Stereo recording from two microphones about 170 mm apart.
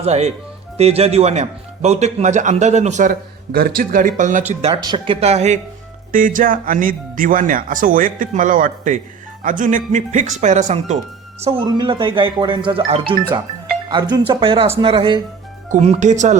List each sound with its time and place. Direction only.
0.0 s speech: 40° right (ahead or behind)
4.8 s speech: 30° right (ahead or behind)
6.1 s speech: 50° right (ahead or behind)
11.6 s speech: 25° right (ahead or behind)
15.7 s speech: 40° right (ahead or behind)